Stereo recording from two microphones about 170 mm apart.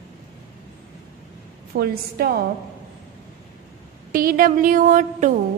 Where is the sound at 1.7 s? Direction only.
65° right (ahead or behind).